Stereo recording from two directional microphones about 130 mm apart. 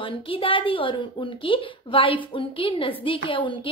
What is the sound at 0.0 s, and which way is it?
Speech, 45° left (ahead or behind).